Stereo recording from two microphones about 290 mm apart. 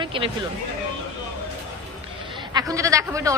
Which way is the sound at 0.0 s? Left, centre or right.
Centre.